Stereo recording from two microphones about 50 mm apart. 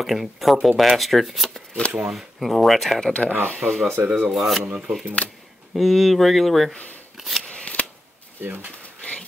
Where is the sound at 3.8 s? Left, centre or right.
Right.